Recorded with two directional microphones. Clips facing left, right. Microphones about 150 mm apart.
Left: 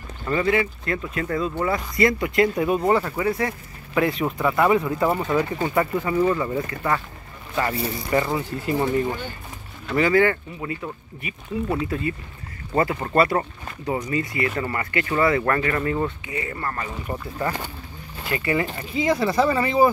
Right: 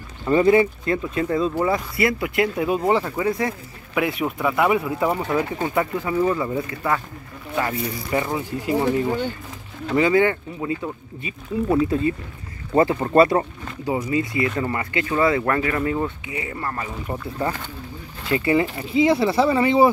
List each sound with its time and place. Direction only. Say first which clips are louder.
0.3 s speech: right 6 dB; 25° right (ahead or behind)
1.6 s speech: even; 5° right (ahead or behind)
2.9 s speech: even; 20° right (ahead or behind)
3.9 s speech: left 1 dB; 5° right (ahead or behind)
8.1 s speech: left 1 dB; 10° right (ahead or behind)
18.3 s speech: right 4 dB; 25° right (ahead or behind)
19.0 s speech: right 1 dB; 10° right (ahead or behind)
19.4 s speech: right 2 dB; 20° right (ahead or behind)